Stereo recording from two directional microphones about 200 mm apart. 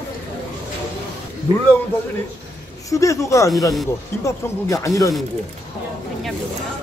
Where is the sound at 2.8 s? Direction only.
15° left (ahead or behind).